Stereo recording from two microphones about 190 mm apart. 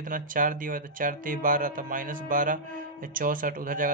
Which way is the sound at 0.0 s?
45° right (ahead or behind).